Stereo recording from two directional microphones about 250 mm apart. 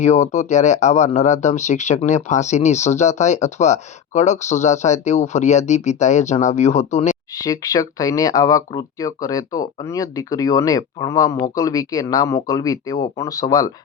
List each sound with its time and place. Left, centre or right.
0.0 s speech: left
7.4 s speech: centre